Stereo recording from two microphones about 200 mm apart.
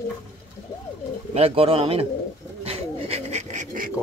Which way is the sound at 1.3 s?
30° right (ahead or behind).